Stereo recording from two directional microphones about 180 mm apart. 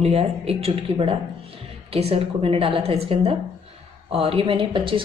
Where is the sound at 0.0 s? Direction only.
35° right (ahead or behind).